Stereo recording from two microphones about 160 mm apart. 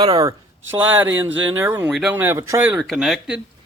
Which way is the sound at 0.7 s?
10° right (ahead or behind).